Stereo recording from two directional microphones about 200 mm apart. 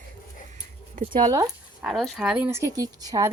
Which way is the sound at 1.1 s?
20° right (ahead or behind).